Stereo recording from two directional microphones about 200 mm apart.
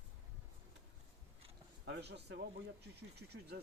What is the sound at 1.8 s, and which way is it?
Speech, 60° right (ahead or behind).